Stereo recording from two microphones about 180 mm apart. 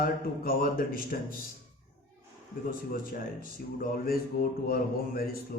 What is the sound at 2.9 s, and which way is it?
A man's voice, 50° left (ahead or behind).